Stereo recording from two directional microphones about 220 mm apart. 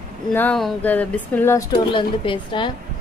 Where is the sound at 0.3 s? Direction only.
5° left (ahead or behind).